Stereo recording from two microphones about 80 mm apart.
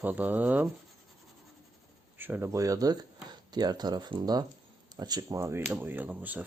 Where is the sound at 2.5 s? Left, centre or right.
Right.